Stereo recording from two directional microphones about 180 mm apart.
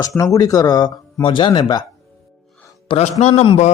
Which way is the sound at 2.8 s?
35° left (ahead or behind).